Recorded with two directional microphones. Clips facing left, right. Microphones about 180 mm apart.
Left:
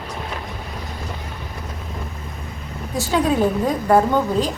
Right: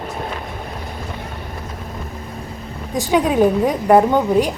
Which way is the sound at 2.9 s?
15° right (ahead or behind).